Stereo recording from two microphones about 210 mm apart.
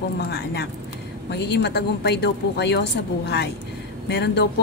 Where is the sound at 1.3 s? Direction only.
50° left (ahead or behind).